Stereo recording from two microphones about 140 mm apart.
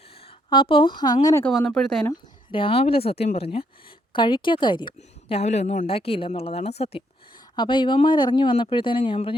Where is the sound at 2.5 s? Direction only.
40° left (ahead or behind).